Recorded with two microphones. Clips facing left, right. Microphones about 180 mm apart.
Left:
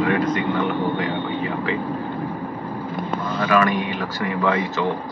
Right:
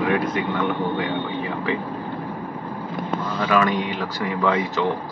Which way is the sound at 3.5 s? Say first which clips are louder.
Left 1 dB; 15° right (ahead or behind).